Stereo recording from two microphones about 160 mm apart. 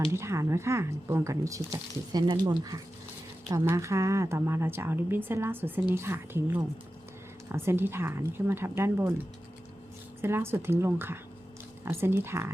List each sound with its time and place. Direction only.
0.1 s a woman's voice: 15° right (ahead or behind)
10.2 s a woman's voice: 15° right (ahead or behind)